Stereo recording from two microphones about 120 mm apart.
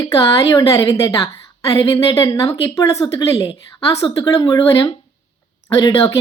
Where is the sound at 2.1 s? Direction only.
30° left (ahead or behind).